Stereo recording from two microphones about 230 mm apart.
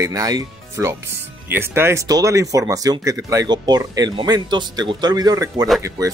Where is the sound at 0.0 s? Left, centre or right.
Centre.